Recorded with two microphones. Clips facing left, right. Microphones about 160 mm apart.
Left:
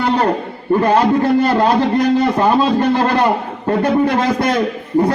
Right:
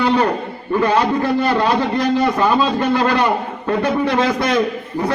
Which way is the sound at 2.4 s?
40° left (ahead or behind).